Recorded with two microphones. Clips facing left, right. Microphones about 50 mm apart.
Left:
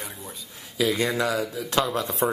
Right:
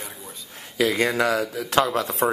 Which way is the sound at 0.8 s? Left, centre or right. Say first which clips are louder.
Right 3 dB; right.